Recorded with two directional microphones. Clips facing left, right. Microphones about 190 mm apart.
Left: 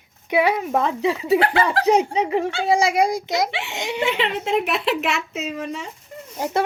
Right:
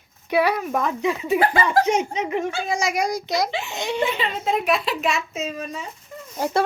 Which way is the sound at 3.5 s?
90° left.